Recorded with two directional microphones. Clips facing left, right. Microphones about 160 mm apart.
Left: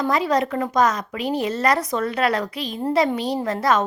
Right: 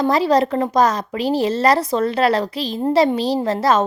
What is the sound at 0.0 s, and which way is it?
A woman's voice, 30° right (ahead or behind).